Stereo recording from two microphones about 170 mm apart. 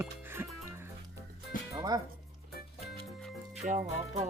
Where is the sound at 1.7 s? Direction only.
25° right (ahead or behind).